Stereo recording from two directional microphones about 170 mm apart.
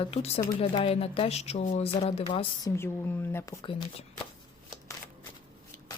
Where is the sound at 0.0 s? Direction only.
35° left (ahead or behind).